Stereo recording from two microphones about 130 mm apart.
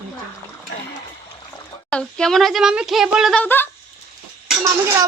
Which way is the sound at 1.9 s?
5° left (ahead or behind).